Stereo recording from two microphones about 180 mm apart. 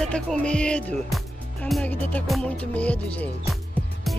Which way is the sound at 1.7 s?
5° left (ahead or behind).